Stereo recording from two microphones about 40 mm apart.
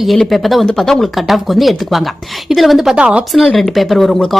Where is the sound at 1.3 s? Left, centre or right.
Centre.